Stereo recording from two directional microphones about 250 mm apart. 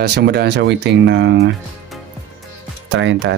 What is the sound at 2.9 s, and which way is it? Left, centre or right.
Speech, right.